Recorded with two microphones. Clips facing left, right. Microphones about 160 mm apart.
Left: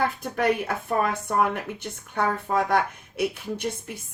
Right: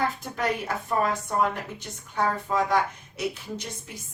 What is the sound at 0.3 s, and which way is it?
A woman's voice, 60° left (ahead or behind).